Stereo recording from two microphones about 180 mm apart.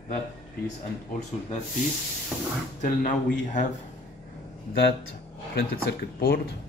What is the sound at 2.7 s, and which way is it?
Speech, 45° left (ahead or behind).